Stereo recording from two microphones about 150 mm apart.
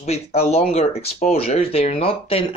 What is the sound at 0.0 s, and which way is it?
Speech, 45° left (ahead or behind).